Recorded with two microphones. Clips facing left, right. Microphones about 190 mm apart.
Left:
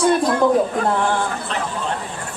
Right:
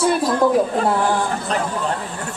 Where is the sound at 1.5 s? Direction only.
40° right (ahead or behind).